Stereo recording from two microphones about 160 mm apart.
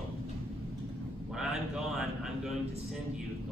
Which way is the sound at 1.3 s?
5° right (ahead or behind).